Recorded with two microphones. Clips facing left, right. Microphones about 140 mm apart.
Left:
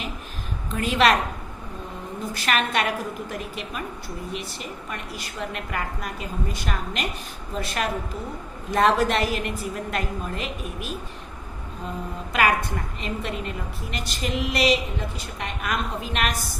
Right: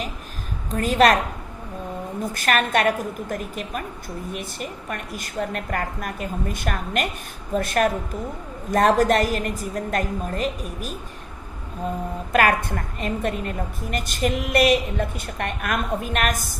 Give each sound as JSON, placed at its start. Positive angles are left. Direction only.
{"t": 0.7, "sound": "a woman's voice", "side_deg": -40}
{"t": 2.3, "sound": "a woman's voice", "side_deg": -50}
{"t": 12.3, "sound": "a woman's voice", "side_deg": -50}